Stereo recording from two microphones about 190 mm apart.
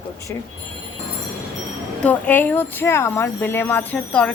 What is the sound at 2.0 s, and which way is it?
Speech, 10° left (ahead or behind).